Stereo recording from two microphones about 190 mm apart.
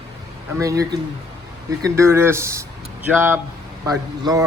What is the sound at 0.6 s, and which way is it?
A man's voice, 15° right (ahead or behind).